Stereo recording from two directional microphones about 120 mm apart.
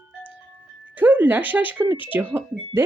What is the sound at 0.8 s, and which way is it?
Speech, 15° right (ahead or behind).